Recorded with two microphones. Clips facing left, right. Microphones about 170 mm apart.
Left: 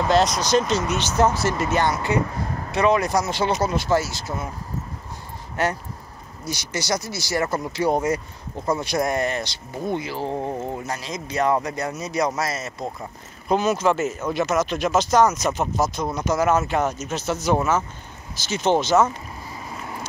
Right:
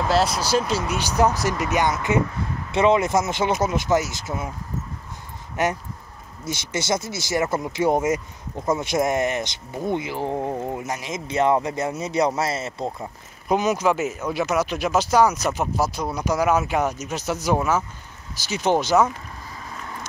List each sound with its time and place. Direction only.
0.1 s speech: 5° right (ahead or behind)
5.6 s speech: 20° right (ahead or behind)
13.5 s speech: 15° right (ahead or behind)